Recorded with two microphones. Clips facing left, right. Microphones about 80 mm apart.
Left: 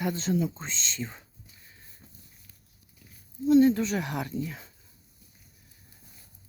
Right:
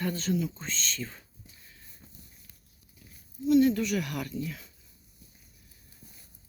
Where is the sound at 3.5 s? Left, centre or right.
Left.